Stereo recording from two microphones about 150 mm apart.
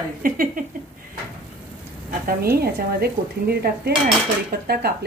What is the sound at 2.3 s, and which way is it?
Dishes, 90° right.